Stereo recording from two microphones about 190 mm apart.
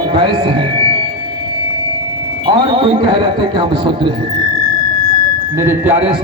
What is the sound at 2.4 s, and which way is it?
Speech, 25° right (ahead or behind).